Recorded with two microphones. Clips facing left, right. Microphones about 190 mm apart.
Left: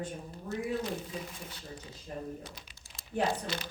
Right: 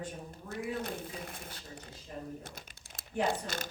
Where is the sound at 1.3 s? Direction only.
55° right (ahead or behind).